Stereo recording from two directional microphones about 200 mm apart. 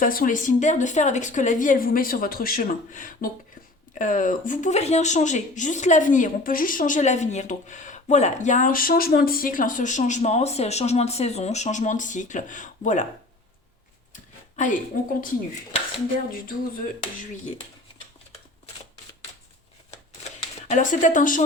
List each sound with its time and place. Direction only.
0.0 s speech: 45° left (ahead or behind)
14.1 s a sound: 40° left (ahead or behind)
16.3 s speech: 45° left (ahead or behind)
20.7 s speech: 40° left (ahead or behind)